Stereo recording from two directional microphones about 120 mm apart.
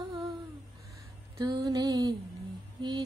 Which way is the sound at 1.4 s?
30° right (ahead or behind).